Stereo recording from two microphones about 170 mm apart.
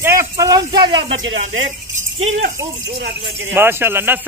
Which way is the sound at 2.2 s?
45° right (ahead or behind).